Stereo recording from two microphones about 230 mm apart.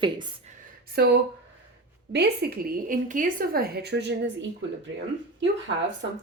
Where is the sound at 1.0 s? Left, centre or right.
Right.